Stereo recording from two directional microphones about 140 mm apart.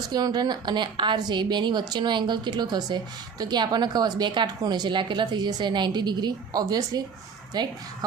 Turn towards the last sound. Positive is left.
turn(degrees=-30)  # may be behind; listen again after turning